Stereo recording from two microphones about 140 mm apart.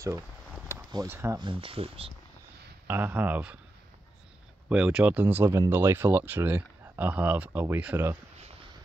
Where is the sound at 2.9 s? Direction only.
15° right (ahead or behind).